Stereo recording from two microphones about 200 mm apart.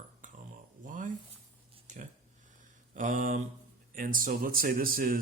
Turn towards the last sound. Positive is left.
turn(degrees=-45)  # may be behind; listen again after turning